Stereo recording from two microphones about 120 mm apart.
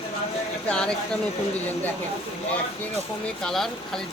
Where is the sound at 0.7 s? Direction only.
5° left (ahead or behind).